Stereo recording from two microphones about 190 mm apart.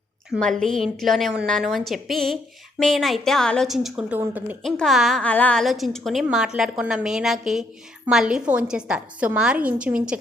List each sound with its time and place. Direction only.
0.3 s a woman's voice: 5° left (ahead or behind)